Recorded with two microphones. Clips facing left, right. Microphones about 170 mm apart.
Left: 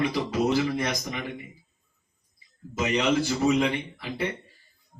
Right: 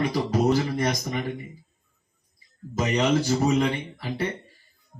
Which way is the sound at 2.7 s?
40° right (ahead or behind).